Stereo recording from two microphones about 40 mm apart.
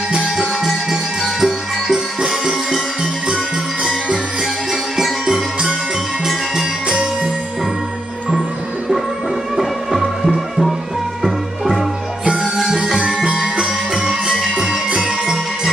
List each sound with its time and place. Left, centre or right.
1.4 s music: centre
4.9 s music: centre
9.6 s music: centre
12.5 s music: centre
12.8 s music: right
14.0 s music: centre
14.9 s jingle bell: right